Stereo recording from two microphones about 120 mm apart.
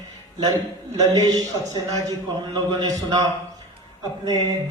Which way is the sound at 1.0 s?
30° right (ahead or behind).